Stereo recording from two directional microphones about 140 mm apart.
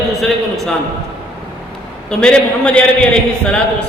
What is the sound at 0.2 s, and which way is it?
Speech, centre (ahead or behind).